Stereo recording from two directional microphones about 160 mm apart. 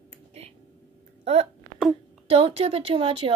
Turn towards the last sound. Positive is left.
turn(degrees=-35)  # may be behind; listen again after turning